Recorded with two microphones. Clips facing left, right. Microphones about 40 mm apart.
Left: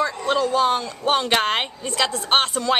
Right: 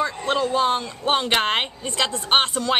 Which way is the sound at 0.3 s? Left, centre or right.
Centre.